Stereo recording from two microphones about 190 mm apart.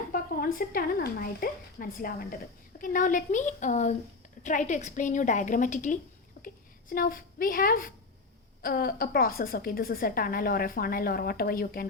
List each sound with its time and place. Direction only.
0.1 s a woman's voice: 50° left (ahead or behind)